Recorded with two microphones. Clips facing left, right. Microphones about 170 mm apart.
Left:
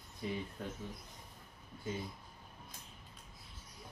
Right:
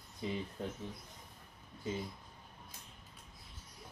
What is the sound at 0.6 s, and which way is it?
Speech, 25° right (ahead or behind).